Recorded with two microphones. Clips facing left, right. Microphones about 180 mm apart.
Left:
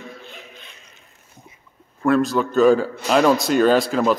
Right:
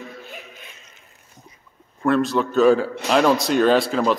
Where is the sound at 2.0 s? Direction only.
Centre (ahead or behind).